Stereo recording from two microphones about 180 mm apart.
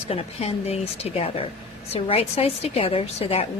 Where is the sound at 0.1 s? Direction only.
35° left (ahead or behind).